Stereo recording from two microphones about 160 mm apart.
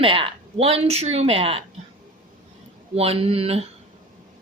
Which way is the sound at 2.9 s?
40° right (ahead or behind).